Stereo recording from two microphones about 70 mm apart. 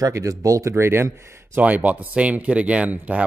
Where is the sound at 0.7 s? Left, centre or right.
Right.